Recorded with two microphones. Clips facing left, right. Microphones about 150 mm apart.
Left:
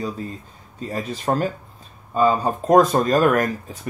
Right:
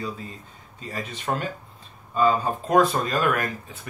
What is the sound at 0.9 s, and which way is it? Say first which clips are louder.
Speech: left 6 dB; 40° left (ahead or behind).